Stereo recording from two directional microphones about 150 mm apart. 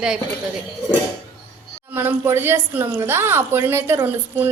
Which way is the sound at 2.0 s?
15° right (ahead or behind).